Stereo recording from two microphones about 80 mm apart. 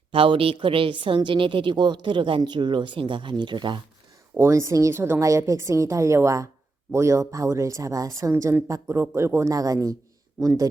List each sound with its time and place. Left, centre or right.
0.3 s a woman's voice: right
4.4 s a woman's voice: right